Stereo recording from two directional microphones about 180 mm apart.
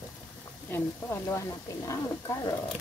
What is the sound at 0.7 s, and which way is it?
Speech, 15° left (ahead or behind).